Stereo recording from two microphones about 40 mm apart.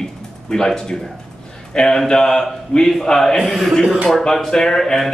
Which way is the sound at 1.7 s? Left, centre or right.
Centre.